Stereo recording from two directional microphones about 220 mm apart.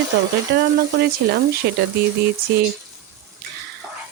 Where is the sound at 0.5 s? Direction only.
45° right (ahead or behind).